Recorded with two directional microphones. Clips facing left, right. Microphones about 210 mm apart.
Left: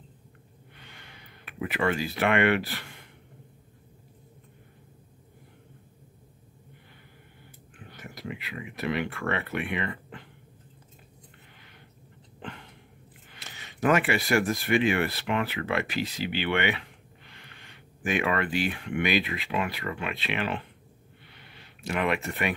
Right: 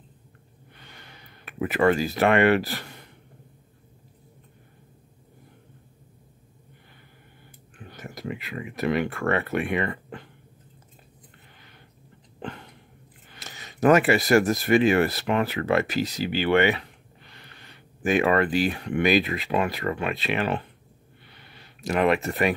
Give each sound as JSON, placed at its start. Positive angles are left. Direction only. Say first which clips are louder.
{"t": 0.7, "sound": "a sound", "louder": "right 2 dB", "side_deg": -40}
{"t": 7.9, "sound": "speech", "louder": "right 4 dB", "side_deg": -45}
{"t": 13.3, "sound": "speech", "louder": "right 4 dB", "side_deg": -40}
{"t": 21.8, "sound": "speech", "louder": "right 6 dB", "side_deg": -40}